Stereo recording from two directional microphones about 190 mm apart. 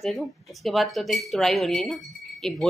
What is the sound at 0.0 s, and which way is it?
A woman's voice, centre (ahead or behind).